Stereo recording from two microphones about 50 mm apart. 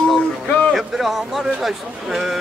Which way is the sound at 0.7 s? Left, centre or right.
Centre.